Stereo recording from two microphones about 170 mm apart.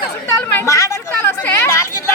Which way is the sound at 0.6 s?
20° left (ahead or behind).